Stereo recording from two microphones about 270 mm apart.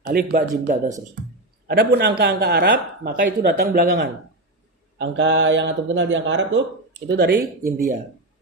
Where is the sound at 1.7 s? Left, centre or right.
Right.